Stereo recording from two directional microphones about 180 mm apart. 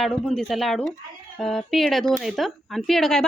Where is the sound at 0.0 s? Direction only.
Centre (ahead or behind).